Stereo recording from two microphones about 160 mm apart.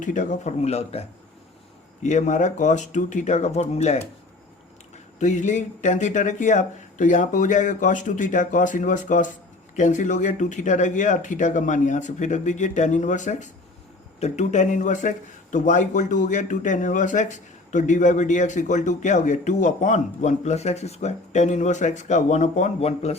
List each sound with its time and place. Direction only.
0.0 s speech: 55° left (ahead or behind)
2.0 s speech: 45° left (ahead or behind)
5.2 s speech: 50° left (ahead or behind)